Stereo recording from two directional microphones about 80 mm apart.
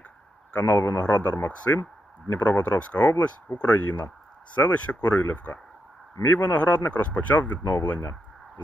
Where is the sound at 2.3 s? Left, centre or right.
Centre.